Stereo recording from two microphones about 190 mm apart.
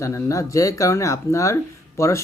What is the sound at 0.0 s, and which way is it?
Speech, 15° left (ahead or behind).